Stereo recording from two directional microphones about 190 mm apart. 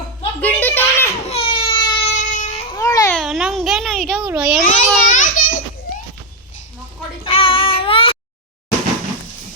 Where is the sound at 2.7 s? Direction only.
15° left (ahead or behind).